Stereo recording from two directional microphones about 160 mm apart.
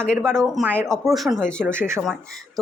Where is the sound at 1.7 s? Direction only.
15° right (ahead or behind).